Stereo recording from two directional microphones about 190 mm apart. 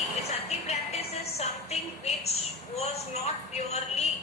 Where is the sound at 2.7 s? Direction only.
35° left (ahead or behind).